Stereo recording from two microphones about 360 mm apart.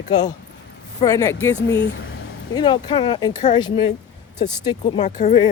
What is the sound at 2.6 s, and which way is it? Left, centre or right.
Speech, centre.